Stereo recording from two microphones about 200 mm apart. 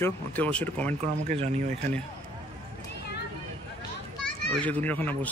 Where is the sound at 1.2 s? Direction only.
35° right (ahead or behind).